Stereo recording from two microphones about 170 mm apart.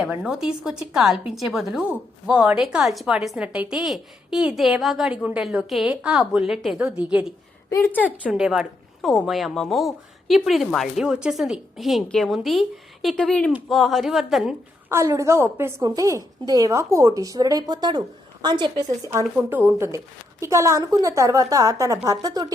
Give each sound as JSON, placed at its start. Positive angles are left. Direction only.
{"t": 0.0, "sound": "a woman's voice", "side_deg": -5}
{"t": 7.7, "sound": "a woman's voice", "side_deg": 15}
{"t": 8.2, "sound": "a woman's voice", "side_deg": -5}
{"t": 14.8, "sound": "a woman's voice", "side_deg": -15}